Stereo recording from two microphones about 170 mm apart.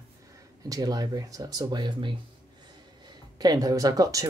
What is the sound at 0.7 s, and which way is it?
Speech, 20° right (ahead or behind).